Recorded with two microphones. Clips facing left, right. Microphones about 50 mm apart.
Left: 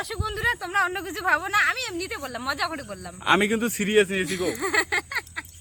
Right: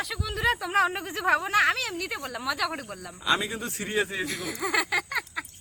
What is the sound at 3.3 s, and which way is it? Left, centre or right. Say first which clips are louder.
Speech: left 7 dB; left.